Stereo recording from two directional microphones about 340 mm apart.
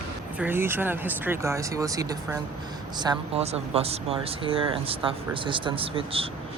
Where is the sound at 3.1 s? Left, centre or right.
Centre.